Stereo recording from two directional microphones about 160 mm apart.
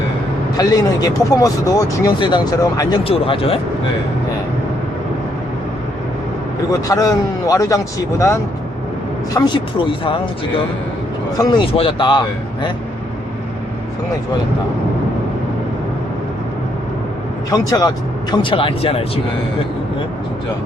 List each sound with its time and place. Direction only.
0.5 s speech: 25° left (ahead or behind)
3.0 s speech: 35° left (ahead or behind)
6.8 s speech: 25° left (ahead or behind)
11.3 s speech: 30° left (ahead or behind)
17.5 s speech: 20° left (ahead or behind)